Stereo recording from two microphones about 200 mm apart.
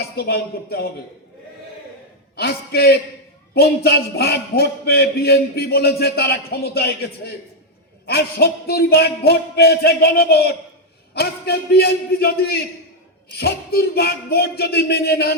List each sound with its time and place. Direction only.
0.0 s a man's voice: 50° left (ahead or behind)
2.3 s a man's voice: 55° left (ahead or behind)